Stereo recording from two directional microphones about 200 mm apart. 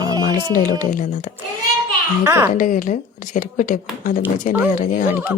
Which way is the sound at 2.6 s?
40° left (ahead or behind).